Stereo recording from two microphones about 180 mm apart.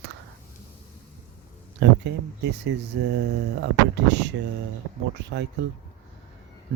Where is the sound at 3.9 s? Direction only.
75° right (ahead or behind).